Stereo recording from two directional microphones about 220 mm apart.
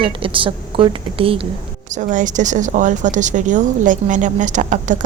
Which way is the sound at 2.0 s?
35° right (ahead or behind).